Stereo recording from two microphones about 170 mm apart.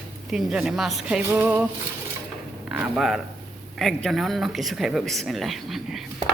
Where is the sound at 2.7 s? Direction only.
5° right (ahead or behind).